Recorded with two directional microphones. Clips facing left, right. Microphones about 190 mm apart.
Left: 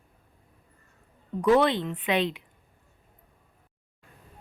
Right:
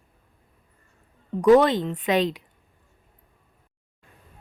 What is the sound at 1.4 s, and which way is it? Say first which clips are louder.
Speech: right 5 dB; 45° right (ahead or behind).